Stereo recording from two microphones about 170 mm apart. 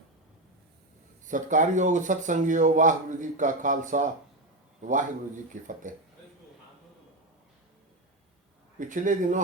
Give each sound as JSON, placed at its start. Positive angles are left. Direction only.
{"t": 1.3, "sound": "speech", "side_deg": -50}
{"t": 8.8, "sound": "speech", "side_deg": -50}